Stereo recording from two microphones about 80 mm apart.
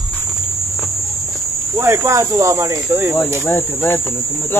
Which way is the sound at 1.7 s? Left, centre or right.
Right.